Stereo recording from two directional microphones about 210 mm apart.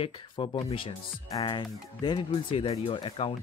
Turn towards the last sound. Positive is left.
turn(degrees=25)  # may be behind; listen again after turning